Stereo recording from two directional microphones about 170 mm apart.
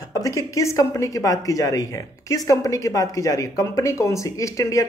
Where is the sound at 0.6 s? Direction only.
20° left (ahead or behind).